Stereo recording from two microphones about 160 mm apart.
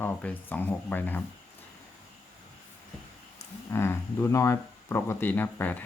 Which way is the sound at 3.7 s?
15° left (ahead or behind).